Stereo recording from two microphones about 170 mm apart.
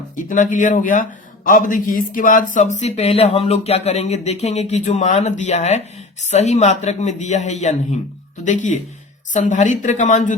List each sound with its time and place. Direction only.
0.2 s speech: 50° left (ahead or behind)